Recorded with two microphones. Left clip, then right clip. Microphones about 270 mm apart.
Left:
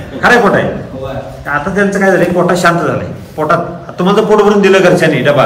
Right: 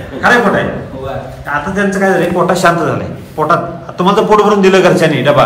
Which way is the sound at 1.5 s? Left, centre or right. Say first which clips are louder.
Left 2 dB; centre.